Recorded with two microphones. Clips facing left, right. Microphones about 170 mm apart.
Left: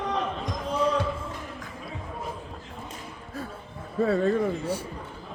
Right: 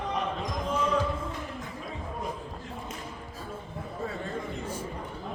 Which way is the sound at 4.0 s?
70° left (ahead or behind).